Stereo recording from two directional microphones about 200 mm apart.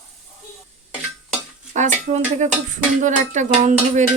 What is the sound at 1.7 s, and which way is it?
Speech, 35° right (ahead or behind).